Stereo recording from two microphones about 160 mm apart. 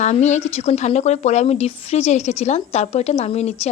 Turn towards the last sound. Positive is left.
turn(degrees=40)  # may be behind; listen again after turning